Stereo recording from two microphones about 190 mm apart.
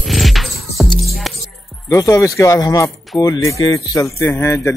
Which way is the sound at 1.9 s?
15° left (ahead or behind).